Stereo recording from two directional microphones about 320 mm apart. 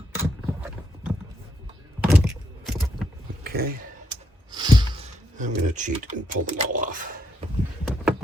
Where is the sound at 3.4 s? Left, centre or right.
Right.